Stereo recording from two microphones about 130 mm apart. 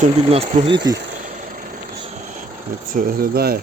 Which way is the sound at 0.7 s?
35° right (ahead or behind).